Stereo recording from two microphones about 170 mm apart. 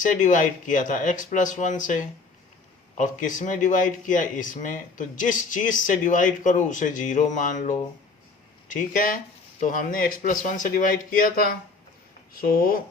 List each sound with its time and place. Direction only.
0.0 s speech: 50° left (ahead or behind)
3.0 s speech: 50° left (ahead or behind)